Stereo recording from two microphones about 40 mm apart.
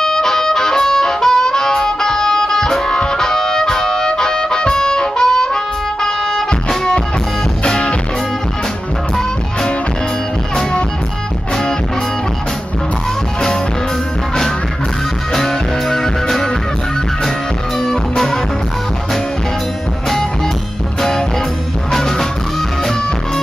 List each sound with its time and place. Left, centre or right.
0.0 s harmonica: centre
6.0 s music: centre
7.6 s music: left
15.3 s music: centre
17.7 s music: centre
21.9 s music: centre